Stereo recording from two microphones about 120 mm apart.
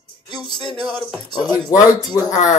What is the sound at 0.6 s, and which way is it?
Music, centre (ahead or behind).